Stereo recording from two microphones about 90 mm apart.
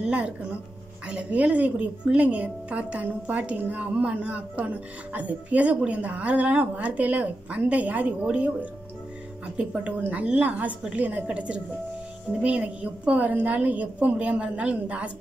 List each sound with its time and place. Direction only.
0.0 s music: 10° right (ahead or behind)
1.0 s a woman's voice: 15° right (ahead or behind)
9.6 s a woman's voice: 15° right (ahead or behind)